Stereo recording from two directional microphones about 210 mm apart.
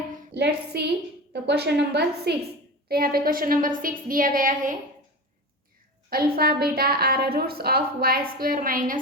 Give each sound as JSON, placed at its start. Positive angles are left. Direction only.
{"t": 0.3, "sound": "a woman's voice", "side_deg": -50}
{"t": 6.1, "sound": "a woman's voice", "side_deg": -45}